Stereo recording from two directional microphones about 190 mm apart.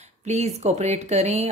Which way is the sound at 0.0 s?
35° right (ahead or behind).